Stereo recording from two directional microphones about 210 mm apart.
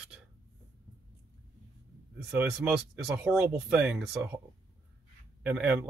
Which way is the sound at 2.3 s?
5° right (ahead or behind).